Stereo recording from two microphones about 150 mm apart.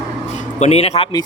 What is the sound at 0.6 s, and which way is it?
Speech, 45° left (ahead or behind).